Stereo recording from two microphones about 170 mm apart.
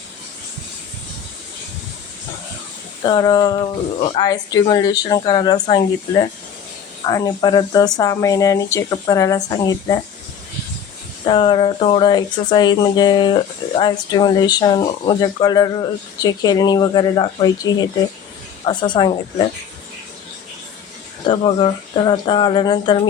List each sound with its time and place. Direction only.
3.0 s speech: 25° left (ahead or behind)
11.3 s speech: 30° left (ahead or behind)
21.2 s speech: 30° left (ahead or behind)